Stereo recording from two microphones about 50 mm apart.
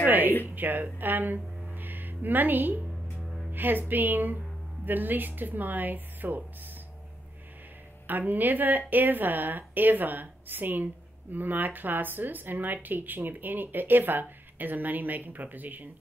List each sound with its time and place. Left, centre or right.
0.0 s speech: right
1.7 s music: right
3.2 s music: centre
3.5 s speech: right
8.1 s speech: right